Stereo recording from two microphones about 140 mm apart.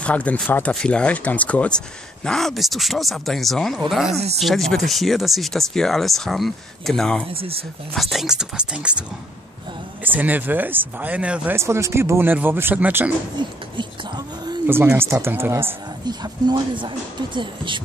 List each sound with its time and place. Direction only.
0.0 s speech: 10° left (ahead or behind)
4.1 s speech: 50° right (ahead or behind)
4.4 s speech: centre (ahead or behind)
10.0 s speech: 10° right (ahead or behind)
13.4 s speech: 35° right (ahead or behind)
14.7 s speech: 15° right (ahead or behind)
16.1 s speech: 30° right (ahead or behind)